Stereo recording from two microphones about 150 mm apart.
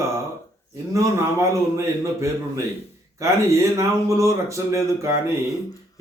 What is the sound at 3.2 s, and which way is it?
Speech, 20° right (ahead or behind).